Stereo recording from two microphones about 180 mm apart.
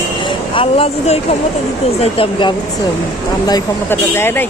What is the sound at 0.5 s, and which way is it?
Speech, 30° left (ahead or behind).